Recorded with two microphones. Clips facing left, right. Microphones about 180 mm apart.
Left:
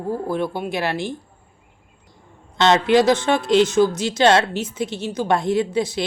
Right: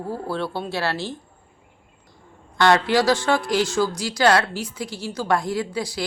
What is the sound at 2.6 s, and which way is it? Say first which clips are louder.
A woman's voice: left 3 dB; 20° left (ahead or behind).